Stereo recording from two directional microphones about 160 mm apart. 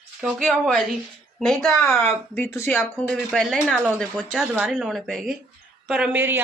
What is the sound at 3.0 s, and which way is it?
A woman's voice, centre (ahead or behind).